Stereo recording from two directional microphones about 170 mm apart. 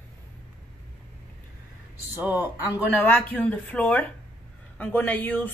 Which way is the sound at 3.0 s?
10° left (ahead or behind).